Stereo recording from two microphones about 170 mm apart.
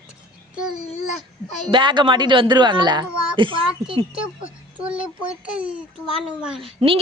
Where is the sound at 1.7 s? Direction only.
30° right (ahead or behind).